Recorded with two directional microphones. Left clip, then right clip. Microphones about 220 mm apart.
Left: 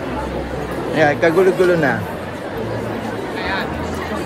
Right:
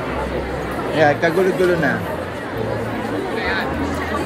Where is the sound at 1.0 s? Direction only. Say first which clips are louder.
Left 1 dB; 25° left (ahead or behind).